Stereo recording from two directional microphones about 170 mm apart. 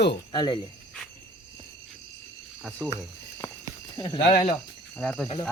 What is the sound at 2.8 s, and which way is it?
Speech, 10° right (ahead or behind).